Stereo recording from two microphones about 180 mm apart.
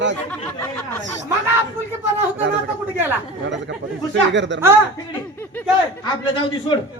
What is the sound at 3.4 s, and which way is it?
Speech, 80° right.